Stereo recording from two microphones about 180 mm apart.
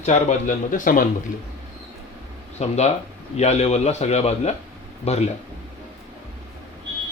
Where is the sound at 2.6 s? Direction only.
35° left (ahead or behind).